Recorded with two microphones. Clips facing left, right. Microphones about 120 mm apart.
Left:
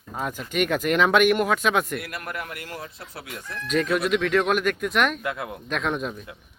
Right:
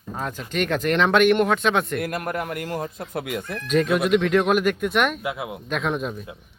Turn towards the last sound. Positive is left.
turn(degrees=0)  # may be behind; listen again after turning